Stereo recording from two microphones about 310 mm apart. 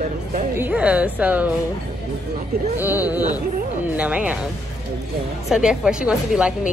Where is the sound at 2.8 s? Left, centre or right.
Centre.